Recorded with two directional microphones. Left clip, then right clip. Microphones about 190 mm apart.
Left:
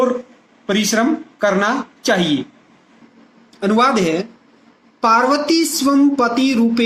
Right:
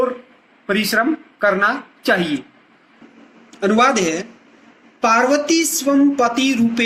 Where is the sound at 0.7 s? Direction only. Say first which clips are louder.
Even; 35° left (ahead or behind).